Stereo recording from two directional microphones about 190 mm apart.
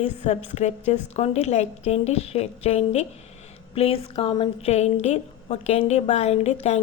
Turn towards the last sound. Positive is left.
turn(degrees=35)  # may be behind; listen again after turning